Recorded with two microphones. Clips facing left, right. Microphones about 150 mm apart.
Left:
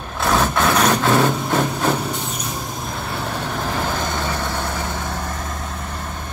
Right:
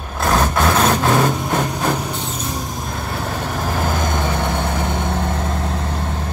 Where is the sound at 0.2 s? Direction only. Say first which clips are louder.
Right 1 dB; centre (ahead or behind).